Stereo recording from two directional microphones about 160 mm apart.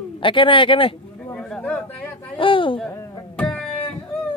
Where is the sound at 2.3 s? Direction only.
30° left (ahead or behind).